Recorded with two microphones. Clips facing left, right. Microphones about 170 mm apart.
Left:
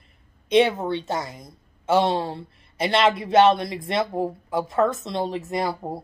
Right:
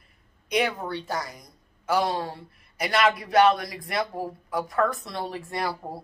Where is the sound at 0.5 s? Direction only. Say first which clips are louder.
Left 7 dB; 25° left (ahead or behind).